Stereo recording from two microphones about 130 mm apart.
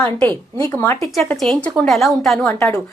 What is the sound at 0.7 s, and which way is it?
Speech, 20° left (ahead or behind).